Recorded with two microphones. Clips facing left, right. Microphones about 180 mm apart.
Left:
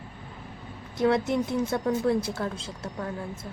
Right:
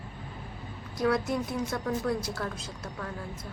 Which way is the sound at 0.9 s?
25° left (ahead or behind).